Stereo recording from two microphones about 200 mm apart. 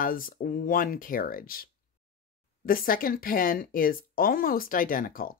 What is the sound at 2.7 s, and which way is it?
Speech, 45° left (ahead or behind).